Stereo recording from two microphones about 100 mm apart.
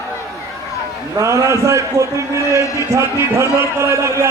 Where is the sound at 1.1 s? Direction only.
30° right (ahead or behind).